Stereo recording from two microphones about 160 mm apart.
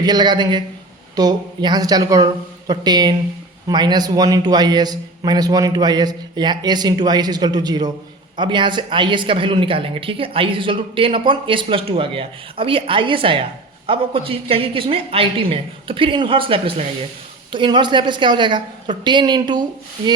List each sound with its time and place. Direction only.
0.0 s a man's voice: 25° right (ahead or behind)